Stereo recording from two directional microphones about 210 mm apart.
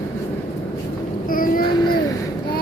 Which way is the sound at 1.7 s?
20° left (ahead or behind).